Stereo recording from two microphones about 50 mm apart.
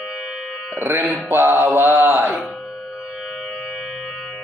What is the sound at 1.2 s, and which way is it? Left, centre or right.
Mantra, right.